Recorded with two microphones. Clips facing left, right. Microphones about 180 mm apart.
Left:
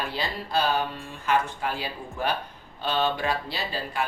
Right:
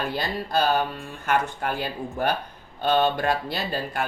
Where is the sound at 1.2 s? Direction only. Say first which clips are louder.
Right 1 dB; 60° right (ahead or behind).